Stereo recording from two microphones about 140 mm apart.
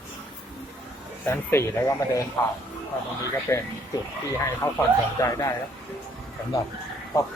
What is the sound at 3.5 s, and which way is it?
Speech, 15° left (ahead or behind).